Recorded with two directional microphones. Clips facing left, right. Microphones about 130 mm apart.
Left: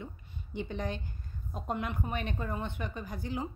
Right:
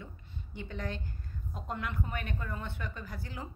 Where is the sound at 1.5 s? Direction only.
20° left (ahead or behind).